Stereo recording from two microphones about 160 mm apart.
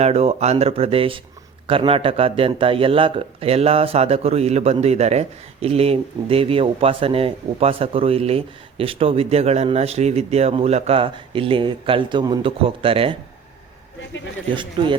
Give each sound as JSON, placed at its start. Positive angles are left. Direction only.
{"t": 0.0, "sound": "a man's voice", "side_deg": -40}
{"t": 14.5, "sound": "a man's voice", "side_deg": -30}